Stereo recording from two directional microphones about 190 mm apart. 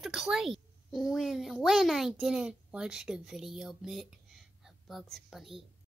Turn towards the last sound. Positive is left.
turn(degrees=0)  # may be behind; listen again after turning